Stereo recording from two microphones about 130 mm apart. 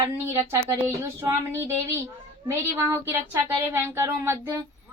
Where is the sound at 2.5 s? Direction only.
20° right (ahead or behind).